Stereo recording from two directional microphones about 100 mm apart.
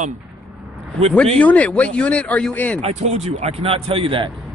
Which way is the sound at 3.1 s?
90° right.